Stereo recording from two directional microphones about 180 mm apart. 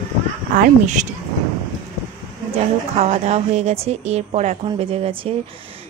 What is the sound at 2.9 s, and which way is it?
A woman's voice, 40° right (ahead or behind).